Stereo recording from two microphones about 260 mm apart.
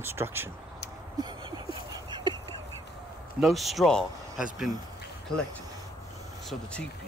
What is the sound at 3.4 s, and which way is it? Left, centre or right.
Speech, centre.